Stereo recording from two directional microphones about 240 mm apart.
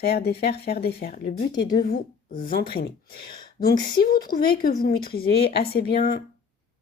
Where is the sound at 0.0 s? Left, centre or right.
Left.